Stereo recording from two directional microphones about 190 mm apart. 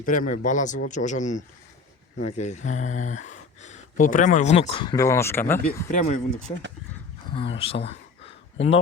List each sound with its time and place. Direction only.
0.0 s speech: 45° left (ahead or behind); by 5.5 s 10° left (ahead or behind)
5.6 s speech: 40° left (ahead or behind)
7.5 s speech: 30° left (ahead or behind)